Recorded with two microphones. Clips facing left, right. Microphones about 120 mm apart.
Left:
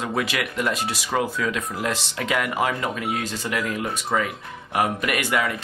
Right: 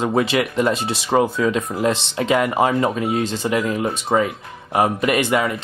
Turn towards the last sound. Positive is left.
turn(degrees=-25)  # may be behind; listen again after turning